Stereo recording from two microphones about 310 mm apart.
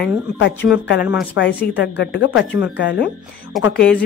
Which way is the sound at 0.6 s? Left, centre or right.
Centre.